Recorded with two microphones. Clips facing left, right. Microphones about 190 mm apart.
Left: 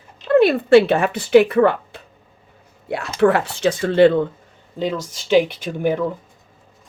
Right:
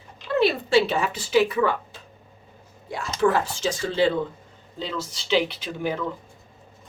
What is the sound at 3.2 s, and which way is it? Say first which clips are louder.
Speech: left 5 dB; 65° left (ahead or behind).